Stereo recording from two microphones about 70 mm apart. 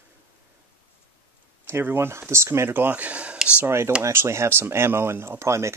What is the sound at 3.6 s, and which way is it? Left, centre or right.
Speech, right.